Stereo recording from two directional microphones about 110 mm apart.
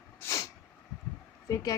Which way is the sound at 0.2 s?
25° left (ahead or behind).